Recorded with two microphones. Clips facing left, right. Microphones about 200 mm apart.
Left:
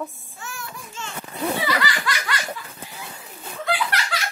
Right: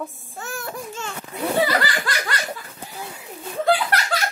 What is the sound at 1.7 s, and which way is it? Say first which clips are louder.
Laughter: right 2 dB; 35° right (ahead or behind).